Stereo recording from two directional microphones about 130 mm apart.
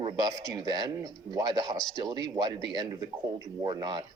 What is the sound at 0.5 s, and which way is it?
Speech, 30° right (ahead or behind).